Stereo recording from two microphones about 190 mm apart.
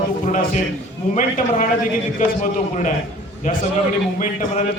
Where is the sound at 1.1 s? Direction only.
45° left (ahead or behind).